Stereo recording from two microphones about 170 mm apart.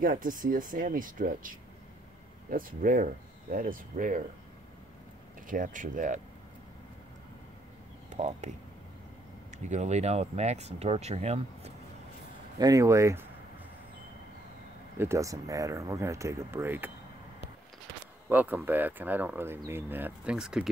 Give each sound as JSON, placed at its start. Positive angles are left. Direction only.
{"t": 0.0, "sound": "speech", "side_deg": -55}
{"t": 5.5, "sound": "speech", "side_deg": -50}
{"t": 8.1, "sound": "speech", "side_deg": -40}
{"t": 9.7, "sound": "speech", "side_deg": -40}
{"t": 12.5, "sound": "speech", "side_deg": -20}
{"t": 15.0, "sound": "speech", "side_deg": -15}
{"t": 18.3, "sound": "speech", "side_deg": -10}